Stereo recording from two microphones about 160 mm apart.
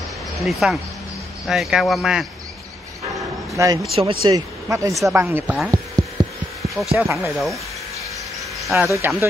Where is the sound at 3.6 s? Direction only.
20° right (ahead or behind).